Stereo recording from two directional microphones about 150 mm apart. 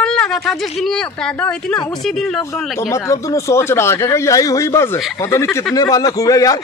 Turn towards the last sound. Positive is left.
turn(degrees=25)  # may be behind; listen again after turning